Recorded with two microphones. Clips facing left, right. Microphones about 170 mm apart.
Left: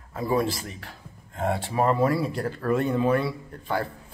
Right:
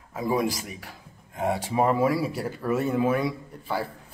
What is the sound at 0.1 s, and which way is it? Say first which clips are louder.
A man's voice: left 1 dB; 10° right (ahead or behind).